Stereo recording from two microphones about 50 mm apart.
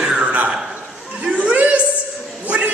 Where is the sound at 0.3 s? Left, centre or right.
Right.